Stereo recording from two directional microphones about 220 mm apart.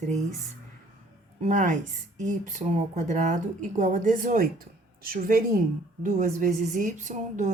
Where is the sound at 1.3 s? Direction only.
35° right (ahead or behind).